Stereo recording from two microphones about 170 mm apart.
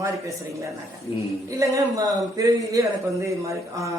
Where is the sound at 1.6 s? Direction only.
20° right (ahead or behind).